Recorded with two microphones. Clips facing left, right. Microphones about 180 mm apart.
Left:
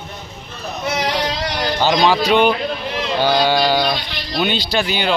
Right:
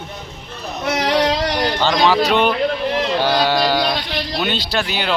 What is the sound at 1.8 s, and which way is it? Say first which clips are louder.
Speech: left 1 dB; centre (ahead or behind).